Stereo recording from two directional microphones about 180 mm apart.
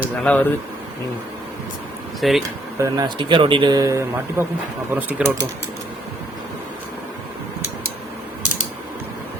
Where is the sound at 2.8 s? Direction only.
20° right (ahead or behind).